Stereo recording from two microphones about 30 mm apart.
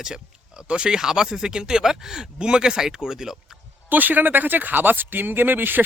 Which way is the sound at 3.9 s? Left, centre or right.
Right.